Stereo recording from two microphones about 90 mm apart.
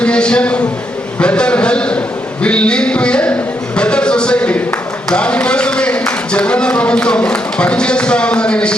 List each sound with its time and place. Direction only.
0.0 s a man's voice: 10° left (ahead or behind)
3.8 s a sound: 10° left (ahead or behind)
5.0 s speech: 10° left (ahead or behind)